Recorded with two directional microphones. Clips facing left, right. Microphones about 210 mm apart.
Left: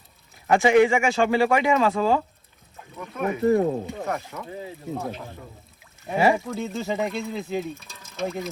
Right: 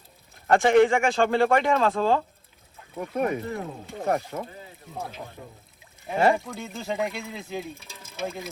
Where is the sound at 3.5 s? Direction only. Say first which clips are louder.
Left 13 dB; 55° left (ahead or behind).